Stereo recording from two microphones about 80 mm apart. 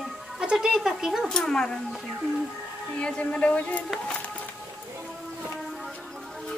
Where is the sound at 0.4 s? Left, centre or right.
Centre.